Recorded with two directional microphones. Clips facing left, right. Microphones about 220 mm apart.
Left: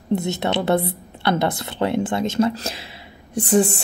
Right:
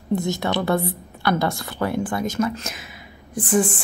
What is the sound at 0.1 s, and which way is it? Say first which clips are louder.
Speech: left 1 dB; 70° left (ahead or behind).